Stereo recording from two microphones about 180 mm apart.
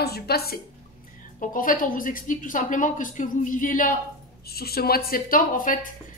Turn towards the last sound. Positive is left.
turn(degrees=50)  # may be behind; listen again after turning